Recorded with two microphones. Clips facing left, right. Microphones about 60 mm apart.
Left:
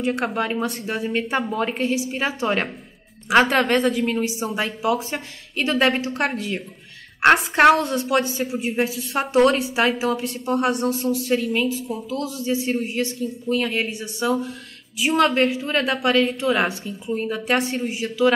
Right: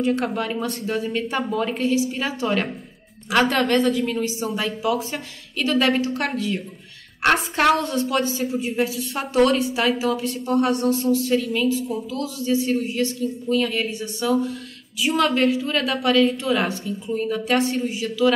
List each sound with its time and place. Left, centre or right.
0.0 s a woman's voice: left